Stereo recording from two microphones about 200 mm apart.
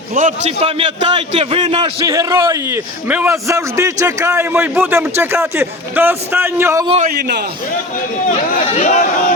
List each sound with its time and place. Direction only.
0.1 s a man's voice: 40° right (ahead or behind); by 6.8 s 10° right (ahead or behind)
7.2 s a man's voice: 55° right (ahead or behind)
8.3 s speech: 35° left (ahead or behind)